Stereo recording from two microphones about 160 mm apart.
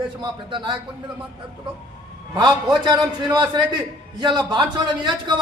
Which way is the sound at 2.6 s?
25° right (ahead or behind).